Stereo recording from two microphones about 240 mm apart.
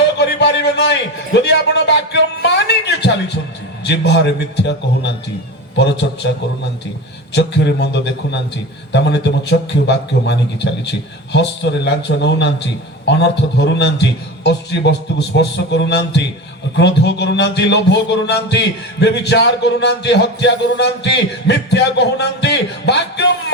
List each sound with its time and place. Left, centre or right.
0.2 s a sound: left
3.8 s a man's voice: left
7.3 s a man's voice: left
14.4 s a man's voice: left